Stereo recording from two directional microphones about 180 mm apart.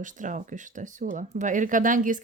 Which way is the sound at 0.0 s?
45° right (ahead or behind).